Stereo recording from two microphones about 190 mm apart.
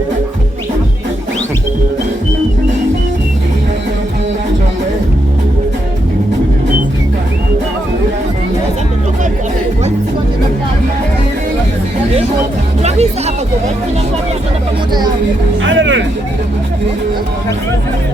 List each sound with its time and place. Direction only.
12.8 s music: 35° right (ahead or behind)
15.6 s music: 80° right